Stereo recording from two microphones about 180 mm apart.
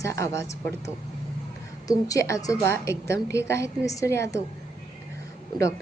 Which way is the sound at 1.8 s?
20° left (ahead or behind).